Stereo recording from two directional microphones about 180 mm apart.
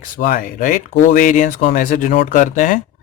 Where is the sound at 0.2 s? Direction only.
50° left (ahead or behind).